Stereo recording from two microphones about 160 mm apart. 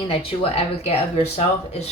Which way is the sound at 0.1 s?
35° left (ahead or behind).